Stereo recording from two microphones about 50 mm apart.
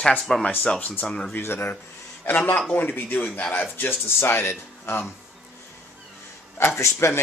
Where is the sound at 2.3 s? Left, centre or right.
Left.